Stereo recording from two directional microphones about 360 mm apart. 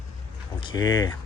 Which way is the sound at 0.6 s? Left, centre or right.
Centre.